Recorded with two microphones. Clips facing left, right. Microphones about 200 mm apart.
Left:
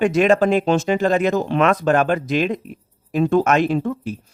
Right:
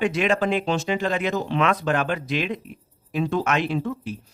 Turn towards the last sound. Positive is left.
turn(degrees=50)  # may be behind; listen again after turning